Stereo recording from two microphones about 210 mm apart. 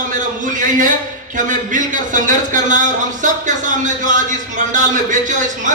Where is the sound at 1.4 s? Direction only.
40° right (ahead or behind).